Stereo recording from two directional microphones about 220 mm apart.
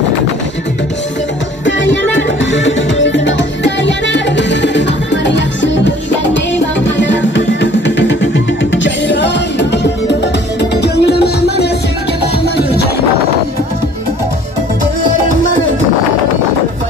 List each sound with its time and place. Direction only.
1.7 s music: 55° left (ahead or behind)